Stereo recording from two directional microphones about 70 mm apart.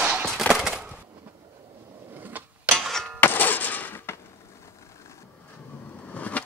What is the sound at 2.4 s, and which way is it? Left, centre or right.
Mechanisms, right.